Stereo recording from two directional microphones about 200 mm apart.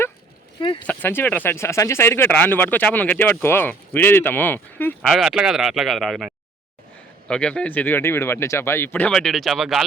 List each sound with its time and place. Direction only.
0.6 s speech: 25° left (ahead or behind)
0.9 s speech: 10° left (ahead or behind)
5.1 s speech: centre (ahead or behind)